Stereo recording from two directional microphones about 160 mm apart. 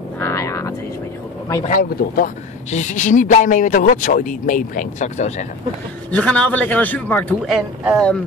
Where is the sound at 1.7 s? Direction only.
65° left (ahead or behind).